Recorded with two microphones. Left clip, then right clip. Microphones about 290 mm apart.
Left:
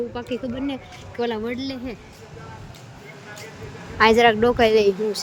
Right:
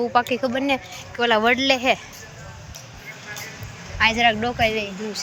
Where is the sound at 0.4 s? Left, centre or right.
Centre.